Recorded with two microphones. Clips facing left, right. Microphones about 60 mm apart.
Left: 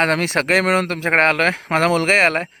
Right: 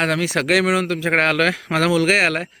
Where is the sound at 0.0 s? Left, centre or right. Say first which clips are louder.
Left 2 dB; left.